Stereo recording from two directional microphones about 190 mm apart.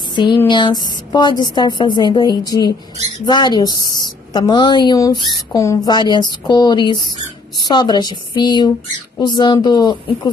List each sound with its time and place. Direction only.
0.1 s a woman's voice: 25° left (ahead or behind)